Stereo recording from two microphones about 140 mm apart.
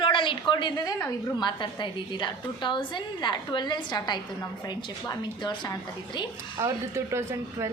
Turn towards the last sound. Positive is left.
turn(degrees=-20)  # may be behind; listen again after turning